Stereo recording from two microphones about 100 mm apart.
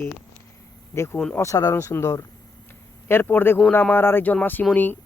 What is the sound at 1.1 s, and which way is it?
Speech, 10° left (ahead or behind).